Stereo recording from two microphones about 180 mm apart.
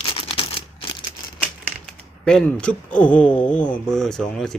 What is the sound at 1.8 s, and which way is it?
Speech, 5° left (ahead or behind).